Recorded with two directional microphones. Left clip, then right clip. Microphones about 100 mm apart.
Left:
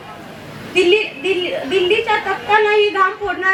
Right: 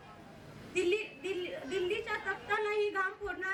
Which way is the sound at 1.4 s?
25° right (ahead or behind).